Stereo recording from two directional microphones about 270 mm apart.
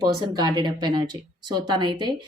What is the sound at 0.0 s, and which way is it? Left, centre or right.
Speech, centre.